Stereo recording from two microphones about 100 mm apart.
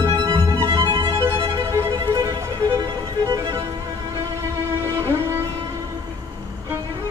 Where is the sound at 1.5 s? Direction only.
30° right (ahead or behind).